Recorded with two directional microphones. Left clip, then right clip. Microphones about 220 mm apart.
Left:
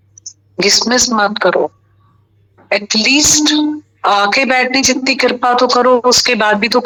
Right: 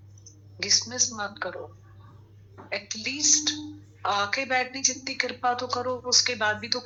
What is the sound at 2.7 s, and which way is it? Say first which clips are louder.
Speech: left 19 dB; 50° left (ahead or behind).